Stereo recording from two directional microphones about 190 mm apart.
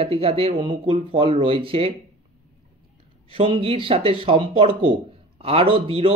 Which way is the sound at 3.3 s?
30° right (ahead or behind).